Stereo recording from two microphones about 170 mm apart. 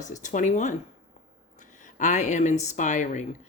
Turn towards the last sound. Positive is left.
turn(degrees=45)  # may be behind; listen again after turning